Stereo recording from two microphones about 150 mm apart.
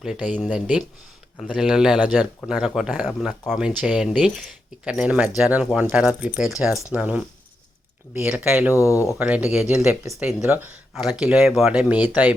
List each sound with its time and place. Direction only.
0.0 s speech: 5° right (ahead or behind)
8.7 s speech: 20° left (ahead or behind)
9.1 s speech: 10° right (ahead or behind)